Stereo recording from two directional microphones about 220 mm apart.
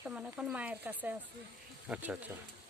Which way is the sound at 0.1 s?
5° right (ahead or behind).